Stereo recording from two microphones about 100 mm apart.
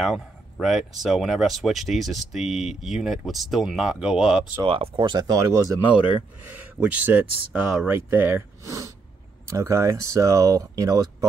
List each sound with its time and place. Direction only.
0.0 s speech: 5° right (ahead or behind)
4.6 s speech: 60° right (ahead or behind)
5.3 s speech: 30° right (ahead or behind)
6.4 s speech: 15° right (ahead or behind)
8.6 s speech: 30° right (ahead or behind)